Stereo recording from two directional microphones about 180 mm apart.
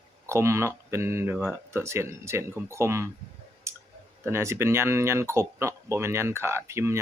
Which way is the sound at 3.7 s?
15° right (ahead or behind).